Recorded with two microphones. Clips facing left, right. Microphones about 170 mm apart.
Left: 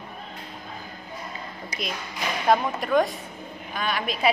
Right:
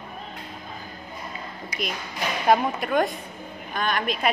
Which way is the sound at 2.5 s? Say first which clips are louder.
Even; centre (ahead or behind).